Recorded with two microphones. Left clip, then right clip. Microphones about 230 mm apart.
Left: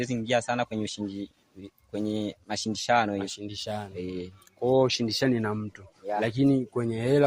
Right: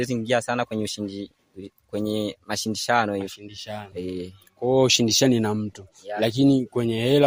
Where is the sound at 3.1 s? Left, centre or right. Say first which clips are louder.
Right 2 dB; centre.